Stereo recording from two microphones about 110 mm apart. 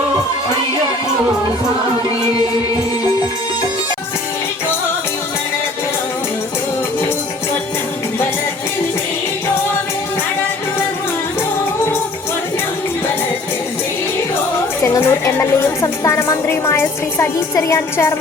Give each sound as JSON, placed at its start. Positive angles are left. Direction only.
{"t": 14.8, "sound": "a woman's voice", "side_deg": 25}